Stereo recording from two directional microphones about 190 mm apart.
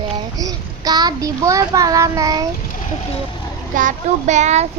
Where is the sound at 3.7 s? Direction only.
45° right (ahead or behind).